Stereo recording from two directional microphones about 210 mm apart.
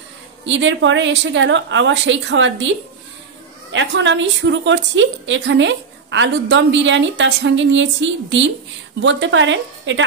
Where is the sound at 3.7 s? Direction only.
60° right (ahead or behind).